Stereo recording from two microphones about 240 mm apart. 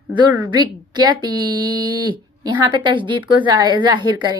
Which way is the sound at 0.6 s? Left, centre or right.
Centre.